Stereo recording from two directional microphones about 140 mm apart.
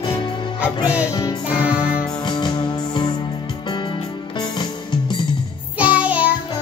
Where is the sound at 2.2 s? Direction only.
35° left (ahead or behind).